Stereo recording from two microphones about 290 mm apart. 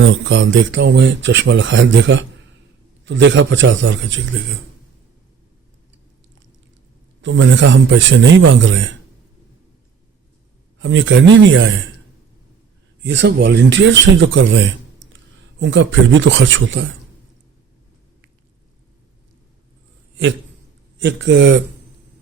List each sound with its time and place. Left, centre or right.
0.0 s speech: right
7.2 s speech: right
10.8 s speech: right
13.0 s speech: right
21.0 s speech: right